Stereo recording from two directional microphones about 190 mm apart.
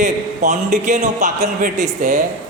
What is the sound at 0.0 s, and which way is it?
A man's voice, 40° right (ahead or behind).